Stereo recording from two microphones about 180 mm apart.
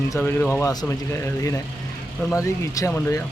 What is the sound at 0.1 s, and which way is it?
Speech, 10° left (ahead or behind).